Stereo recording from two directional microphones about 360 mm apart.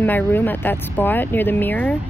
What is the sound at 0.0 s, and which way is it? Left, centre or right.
Speech, centre.